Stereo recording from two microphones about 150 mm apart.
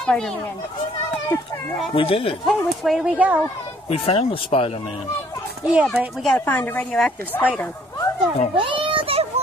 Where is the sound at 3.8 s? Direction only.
40° left (ahead or behind).